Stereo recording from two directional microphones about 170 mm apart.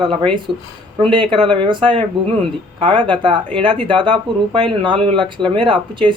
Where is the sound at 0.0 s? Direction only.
30° right (ahead or behind).